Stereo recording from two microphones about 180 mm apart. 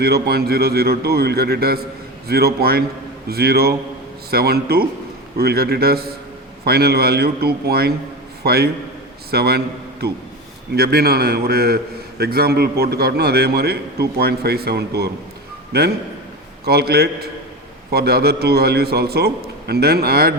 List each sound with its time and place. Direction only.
0.0 s a man's voice: 60° right (ahead or behind)